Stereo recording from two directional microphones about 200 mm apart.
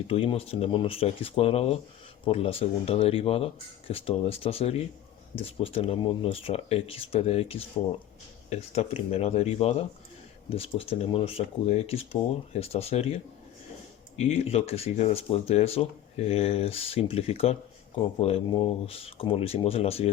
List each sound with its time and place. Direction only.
0.1 s speech: 30° left (ahead or behind)
14.5 s speech: 30° left (ahead or behind)